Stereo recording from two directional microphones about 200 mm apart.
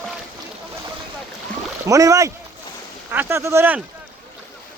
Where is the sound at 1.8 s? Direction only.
15° right (ahead or behind).